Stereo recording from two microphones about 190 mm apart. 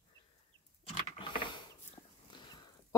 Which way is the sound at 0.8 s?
30° left (ahead or behind).